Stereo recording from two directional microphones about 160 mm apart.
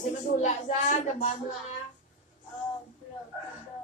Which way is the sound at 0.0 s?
50° left (ahead or behind).